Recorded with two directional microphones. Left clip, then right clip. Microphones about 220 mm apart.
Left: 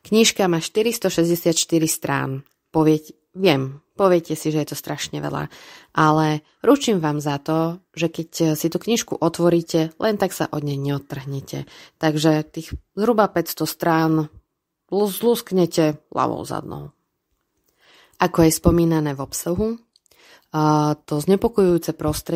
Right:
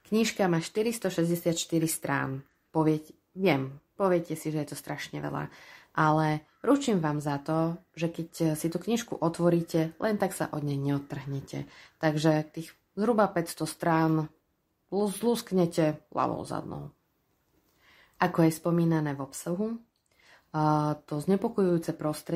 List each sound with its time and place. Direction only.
0.0 s speech: 40° left (ahead or behind)